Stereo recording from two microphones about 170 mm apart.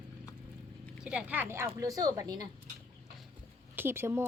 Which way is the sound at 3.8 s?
15° right (ahead or behind).